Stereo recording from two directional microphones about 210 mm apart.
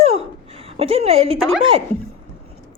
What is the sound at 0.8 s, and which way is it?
Speech, 25° right (ahead or behind).